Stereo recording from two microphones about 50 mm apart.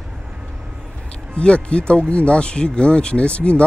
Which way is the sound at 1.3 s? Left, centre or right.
Left.